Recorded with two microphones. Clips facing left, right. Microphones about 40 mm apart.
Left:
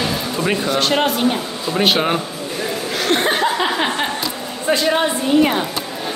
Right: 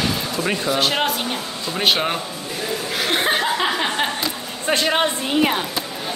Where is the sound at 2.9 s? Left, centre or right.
Centre.